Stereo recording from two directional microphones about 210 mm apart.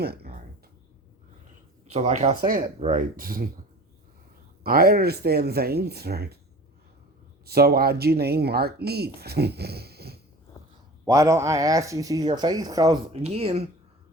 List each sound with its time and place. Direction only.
0.0 s a sound: 50° right (ahead or behind)
1.9 s speech: 30° right (ahead or behind)
4.6 s speech: 45° right (ahead or behind)
7.4 s speech: 45° right (ahead or behind)
11.0 s speech: 15° right (ahead or behind)
13.1 s speech: 30° right (ahead or behind)